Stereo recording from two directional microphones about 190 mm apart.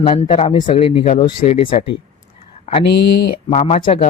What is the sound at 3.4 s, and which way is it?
Speech, 35° left (ahead or behind).